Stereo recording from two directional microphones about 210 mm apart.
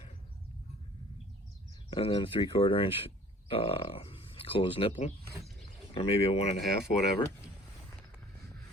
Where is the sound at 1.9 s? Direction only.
25° left (ahead or behind).